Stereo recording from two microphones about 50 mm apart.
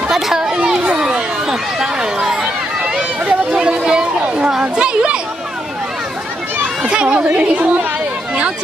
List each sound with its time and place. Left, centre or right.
0.1 s a sound: centre
1.5 s run: centre
6.8 s a woman's voice: centre